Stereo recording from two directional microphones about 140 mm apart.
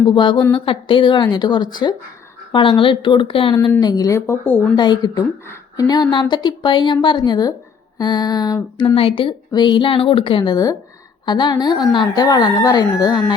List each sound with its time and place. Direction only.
0.0 s a woman's voice: 35° left (ahead or behind)
3.8 s speech: 30° left (ahead or behind)
4.8 s a woman's voice: 30° left (ahead or behind)
9.0 s a woman's voice: 40° left (ahead or behind)